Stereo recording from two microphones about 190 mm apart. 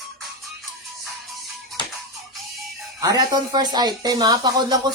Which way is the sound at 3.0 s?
20° right (ahead or behind).